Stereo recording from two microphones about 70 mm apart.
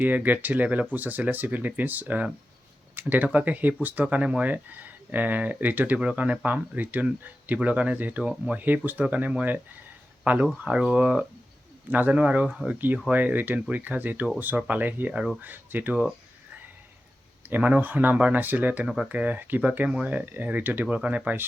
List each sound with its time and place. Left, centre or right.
0.0 s speech: right
2.9 s a sound: right
3.2 s speech: right
10.6 s speech: centre
17.5 s speech: right